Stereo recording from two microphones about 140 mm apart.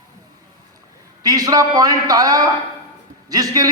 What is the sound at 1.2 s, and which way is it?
A man's voice, 25° right (ahead or behind).